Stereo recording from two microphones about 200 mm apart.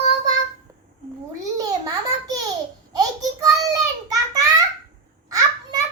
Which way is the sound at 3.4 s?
15° right (ahead or behind).